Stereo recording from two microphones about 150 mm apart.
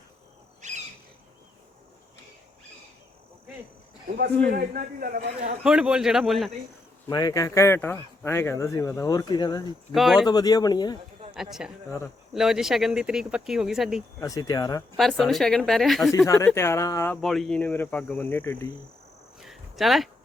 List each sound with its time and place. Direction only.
4.5 s a man's voice: 80° right
5.6 s speech: 5° right (ahead or behind)
7.1 s speech: 25° left (ahead or behind)
9.9 s speech: centre (ahead or behind)
10.2 s speech: 25° left (ahead or behind)
11.6 s speech: 5° right (ahead or behind)
14.2 s speech: 25° left (ahead or behind)
14.9 s speech: centre (ahead or behind)
16.1 s speech: 20° left (ahead or behind)
17.2 s speech: centre (ahead or behind)
19.4 s cricket: centre (ahead or behind)